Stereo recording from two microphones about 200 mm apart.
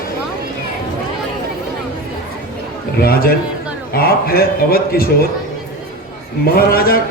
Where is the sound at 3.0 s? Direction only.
50° left (ahead or behind).